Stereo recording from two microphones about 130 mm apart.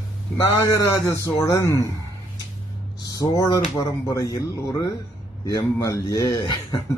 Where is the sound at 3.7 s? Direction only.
25° left (ahead or behind).